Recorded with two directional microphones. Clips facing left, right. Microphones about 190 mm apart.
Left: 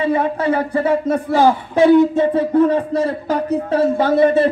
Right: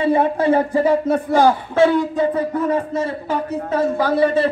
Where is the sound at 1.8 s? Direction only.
20° left (ahead or behind); by 3.8 s 35° left (ahead or behind).